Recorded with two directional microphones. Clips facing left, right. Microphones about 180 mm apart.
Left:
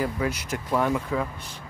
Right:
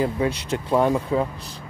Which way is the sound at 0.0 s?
25° right (ahead or behind).